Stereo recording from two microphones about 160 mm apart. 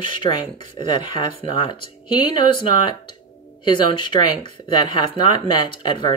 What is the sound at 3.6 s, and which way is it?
Speech, 30° left (ahead or behind).